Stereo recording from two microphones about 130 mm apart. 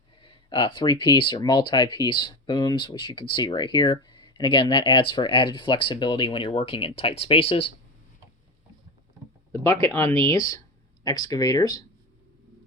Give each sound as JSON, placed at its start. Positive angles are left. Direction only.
{"t": 0.2, "sound": "speech", "side_deg": 40}
{"t": 9.8, "sound": "speech", "side_deg": 20}